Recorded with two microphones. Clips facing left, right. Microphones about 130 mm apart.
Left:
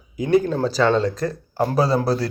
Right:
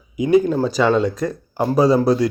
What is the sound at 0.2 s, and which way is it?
Speech, 15° right (ahead or behind).